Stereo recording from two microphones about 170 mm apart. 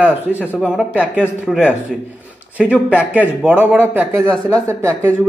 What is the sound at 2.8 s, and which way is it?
A man's voice, 10° right (ahead or behind).